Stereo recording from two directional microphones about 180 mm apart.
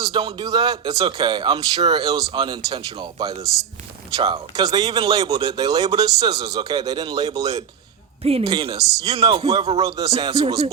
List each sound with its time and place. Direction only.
0.0 s a man's voice: 30° right (ahead or behind)
3.4 s speech: centre (ahead or behind)
4.2 s a man's voice: 25° right (ahead or behind)
8.2 s a man's voice: 35° right (ahead or behind)